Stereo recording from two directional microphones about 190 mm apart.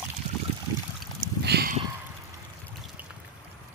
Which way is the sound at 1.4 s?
60° right (ahead or behind).